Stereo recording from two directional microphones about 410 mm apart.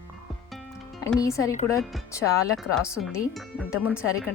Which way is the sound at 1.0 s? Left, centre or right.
Centre.